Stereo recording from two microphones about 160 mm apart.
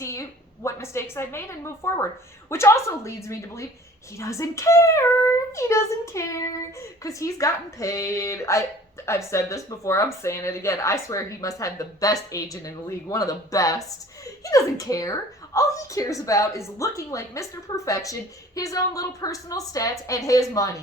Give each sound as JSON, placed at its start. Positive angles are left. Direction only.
{"t": 0.0, "sound": "a woman's voice", "side_deg": 20}